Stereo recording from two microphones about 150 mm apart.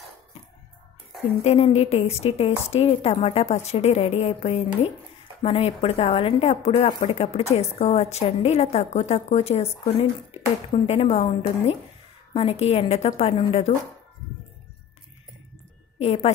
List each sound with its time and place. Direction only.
1.4 s a woman's voice: 45° left (ahead or behind)
16.0 s a woman's voice: 40° left (ahead or behind)